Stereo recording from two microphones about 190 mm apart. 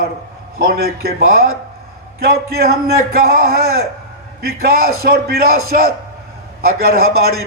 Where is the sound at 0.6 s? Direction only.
50° right (ahead or behind).